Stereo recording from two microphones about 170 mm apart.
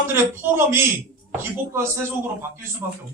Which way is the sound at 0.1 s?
15° right (ahead or behind).